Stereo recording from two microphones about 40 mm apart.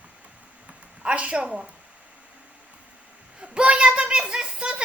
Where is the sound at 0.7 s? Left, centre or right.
Right.